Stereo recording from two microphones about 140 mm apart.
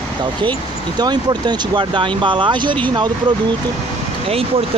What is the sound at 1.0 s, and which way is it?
Speech, 30° right (ahead or behind).